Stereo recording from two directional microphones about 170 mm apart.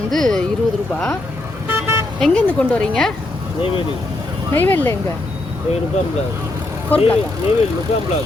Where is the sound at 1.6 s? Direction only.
10° right (ahead or behind).